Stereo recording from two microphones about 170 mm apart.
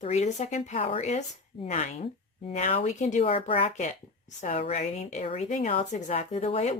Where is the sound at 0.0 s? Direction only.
40° left (ahead or behind).